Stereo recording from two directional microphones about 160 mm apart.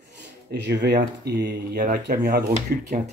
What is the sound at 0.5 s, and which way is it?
Speech, 90° right.